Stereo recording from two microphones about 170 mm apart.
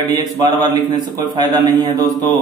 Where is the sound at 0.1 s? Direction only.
25° right (ahead or behind).